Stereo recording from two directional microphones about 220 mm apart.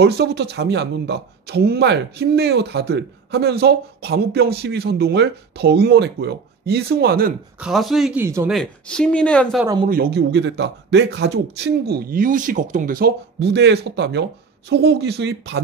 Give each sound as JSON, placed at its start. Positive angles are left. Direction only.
{"t": 0.0, "sound": "a man's voice", "side_deg": -50}
{"t": 7.6, "sound": "speech", "side_deg": 0}
{"t": 8.5, "sound": "speech", "side_deg": 0}
{"t": 9.8, "sound": "a man's voice", "side_deg": -45}